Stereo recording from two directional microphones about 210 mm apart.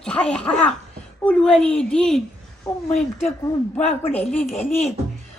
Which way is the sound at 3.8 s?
30° left (ahead or behind).